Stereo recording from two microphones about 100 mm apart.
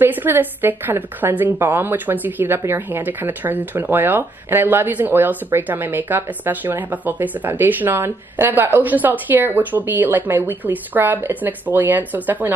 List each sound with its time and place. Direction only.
0.0 s a woman's voice: 20° right (ahead or behind)